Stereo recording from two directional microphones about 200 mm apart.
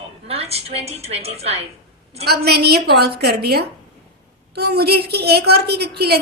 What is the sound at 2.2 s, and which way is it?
A woman's voice, 55° right (ahead or behind).